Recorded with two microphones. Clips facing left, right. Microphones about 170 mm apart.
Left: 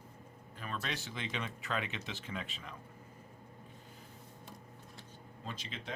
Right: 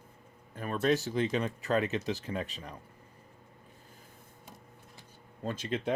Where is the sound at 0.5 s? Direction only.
45° right (ahead or behind).